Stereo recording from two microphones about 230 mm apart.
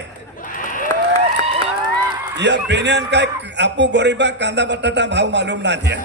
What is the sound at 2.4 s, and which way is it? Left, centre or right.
A man's voice, right.